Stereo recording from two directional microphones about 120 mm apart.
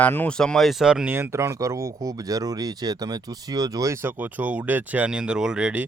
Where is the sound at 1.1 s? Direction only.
20° right (ahead or behind).